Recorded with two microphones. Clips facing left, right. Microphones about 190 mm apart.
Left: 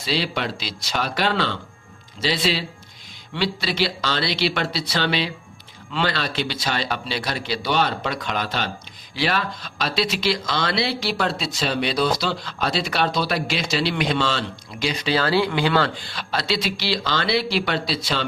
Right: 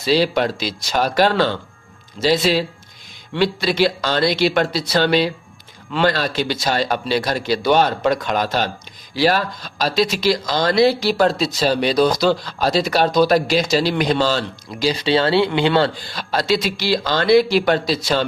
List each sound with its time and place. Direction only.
0.0 s a man's voice: 45° right (ahead or behind); by 15.9 s 25° right (ahead or behind)
16.0 s a man's voice: 40° right (ahead or behind)